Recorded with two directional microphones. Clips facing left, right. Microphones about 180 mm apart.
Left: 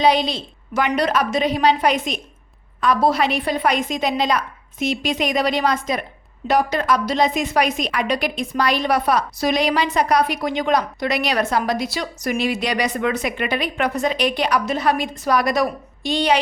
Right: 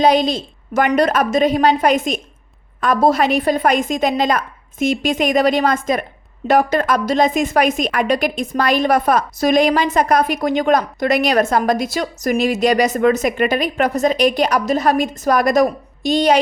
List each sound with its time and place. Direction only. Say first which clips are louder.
0.0 s a woman's voice: right 3 dB; 45° right (ahead or behind)